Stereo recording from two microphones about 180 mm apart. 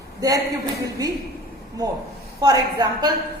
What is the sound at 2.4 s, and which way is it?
Speech, 20° right (ahead or behind).